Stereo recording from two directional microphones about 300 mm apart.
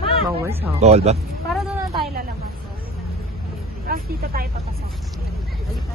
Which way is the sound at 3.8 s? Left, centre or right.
Right.